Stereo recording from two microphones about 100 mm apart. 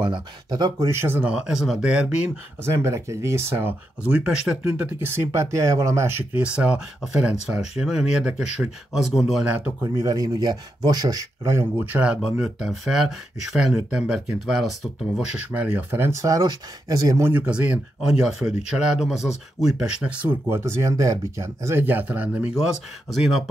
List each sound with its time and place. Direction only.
0.0 s speech: 50° right (ahead or behind)
0.8 s speech: 25° right (ahead or behind)
1.2 s speech: 5° right (ahead or behind)
2.7 s speech: 30° right (ahead or behind)
4.1 s speech: 10° right (ahead or behind)
6.4 s speech: 10° right (ahead or behind)
9.9 s speech: 35° right (ahead or behind)
11.8 s speech: 15° right (ahead or behind)
15.9 s speech: 25° right (ahead or behind)
17.3 s speech: 15° right (ahead or behind)
20.4 s speech: 25° right (ahead or behind)
22.5 s speech: 5° right (ahead or behind)